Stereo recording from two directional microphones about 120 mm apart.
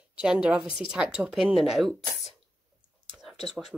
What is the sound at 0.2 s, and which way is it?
Speech, 10° right (ahead or behind).